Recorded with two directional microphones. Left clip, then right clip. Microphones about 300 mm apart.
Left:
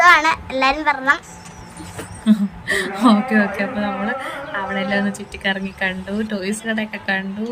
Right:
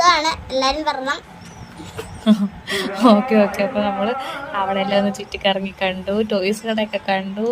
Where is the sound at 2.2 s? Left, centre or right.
Centre.